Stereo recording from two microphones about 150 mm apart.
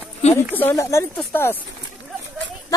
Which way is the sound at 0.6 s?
15° left (ahead or behind).